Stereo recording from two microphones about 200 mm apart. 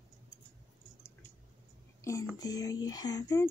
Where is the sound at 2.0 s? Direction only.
15° left (ahead or behind).